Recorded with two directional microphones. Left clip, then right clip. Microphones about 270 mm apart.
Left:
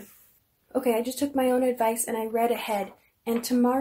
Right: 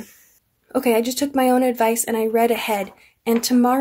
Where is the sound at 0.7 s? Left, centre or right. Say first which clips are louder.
Right 7 dB; right.